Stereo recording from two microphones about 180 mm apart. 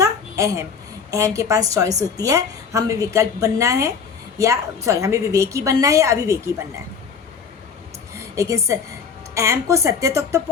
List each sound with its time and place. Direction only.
0.0 s babbling: 15° right (ahead or behind)
1.1 s a woman's voice: 15° right (ahead or behind)
8.4 s a woman's voice: 15° right (ahead or behind)